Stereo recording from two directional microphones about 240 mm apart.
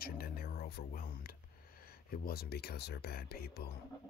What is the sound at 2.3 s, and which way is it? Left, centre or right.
Speech, left.